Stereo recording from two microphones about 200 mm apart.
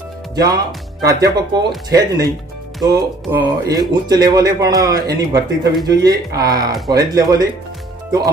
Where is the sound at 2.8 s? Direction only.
20° right (ahead or behind).